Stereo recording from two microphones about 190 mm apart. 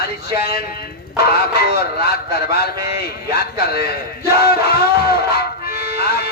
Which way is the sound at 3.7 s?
55° left (ahead or behind).